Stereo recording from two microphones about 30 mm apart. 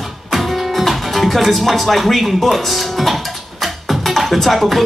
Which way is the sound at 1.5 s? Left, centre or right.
Centre.